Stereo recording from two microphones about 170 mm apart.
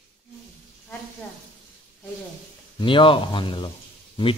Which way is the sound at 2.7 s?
30° left (ahead or behind).